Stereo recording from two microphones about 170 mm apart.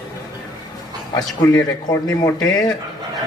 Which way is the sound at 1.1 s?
20° left (ahead or behind).